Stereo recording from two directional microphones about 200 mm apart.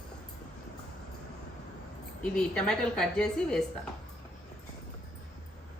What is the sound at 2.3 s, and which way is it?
A woman's voice, 5° left (ahead or behind).